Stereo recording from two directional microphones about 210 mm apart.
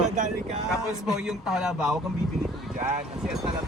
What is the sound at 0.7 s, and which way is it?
A man's voice, centre (ahead or behind).